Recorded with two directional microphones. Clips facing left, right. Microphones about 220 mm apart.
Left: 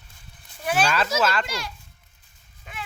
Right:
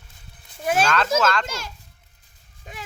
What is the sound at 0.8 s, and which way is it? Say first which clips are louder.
Speech: right 1 dB; 5° left (ahead or behind).